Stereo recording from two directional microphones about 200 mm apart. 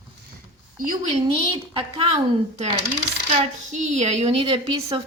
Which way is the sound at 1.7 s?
25° right (ahead or behind).